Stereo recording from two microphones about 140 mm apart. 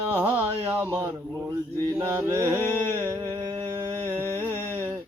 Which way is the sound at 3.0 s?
20° right (ahead or behind).